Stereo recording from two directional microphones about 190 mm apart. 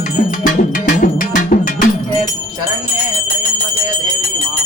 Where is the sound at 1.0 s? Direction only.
45° left (ahead or behind).